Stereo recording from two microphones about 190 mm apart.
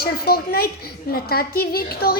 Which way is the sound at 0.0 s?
55° left (ahead or behind).